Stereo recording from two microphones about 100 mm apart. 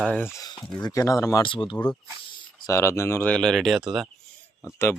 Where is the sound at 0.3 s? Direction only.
40° left (ahead or behind).